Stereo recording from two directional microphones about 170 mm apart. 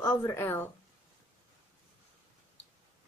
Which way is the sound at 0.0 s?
15° left (ahead or behind).